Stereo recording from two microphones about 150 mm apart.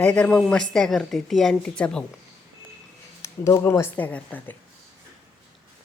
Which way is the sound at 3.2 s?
20° left (ahead or behind).